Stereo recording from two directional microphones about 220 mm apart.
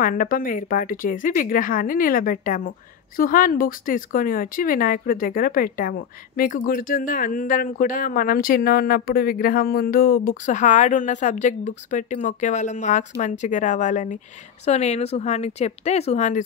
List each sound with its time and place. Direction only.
0.0 s speech: 40° left (ahead or behind)